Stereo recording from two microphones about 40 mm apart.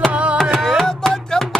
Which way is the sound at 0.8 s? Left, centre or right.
Centre.